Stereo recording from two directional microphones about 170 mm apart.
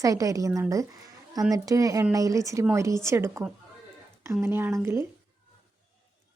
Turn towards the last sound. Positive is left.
turn(degrees=-15)  # may be behind; listen again after turning